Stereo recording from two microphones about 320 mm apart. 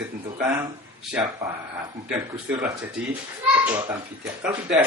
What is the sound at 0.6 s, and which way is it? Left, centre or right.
Speech, centre.